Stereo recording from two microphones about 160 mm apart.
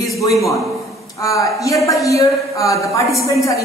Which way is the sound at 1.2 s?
20° left (ahead or behind).